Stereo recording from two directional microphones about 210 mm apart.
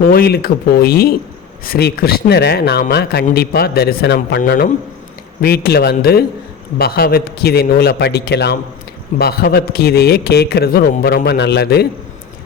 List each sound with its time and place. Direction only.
0.0 s speech: 45° left (ahead or behind)